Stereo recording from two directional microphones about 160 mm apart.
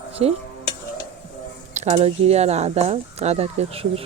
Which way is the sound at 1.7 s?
45° right (ahead or behind).